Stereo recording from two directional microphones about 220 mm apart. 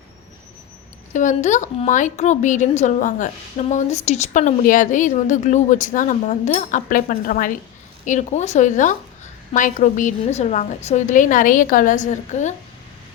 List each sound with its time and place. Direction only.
1.1 s a woman's voice: 35° left (ahead or behind)